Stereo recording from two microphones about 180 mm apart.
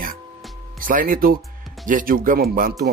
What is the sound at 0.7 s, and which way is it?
Speech, 50° right (ahead or behind).